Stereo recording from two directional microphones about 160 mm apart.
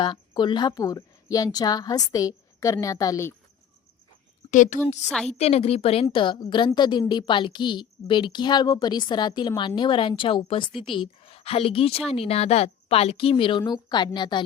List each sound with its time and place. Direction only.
0.0 s a woman's voice: 30° left (ahead or behind)
4.5 s a woman's voice: 55° left (ahead or behind)
5.3 s a woman's voice: 40° left (ahead or behind)